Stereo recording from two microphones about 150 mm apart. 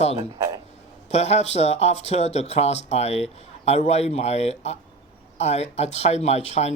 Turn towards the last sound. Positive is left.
turn(degrees=45)  # may be behind; listen again after turning